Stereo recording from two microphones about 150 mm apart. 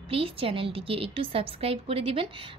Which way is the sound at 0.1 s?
40° right (ahead or behind).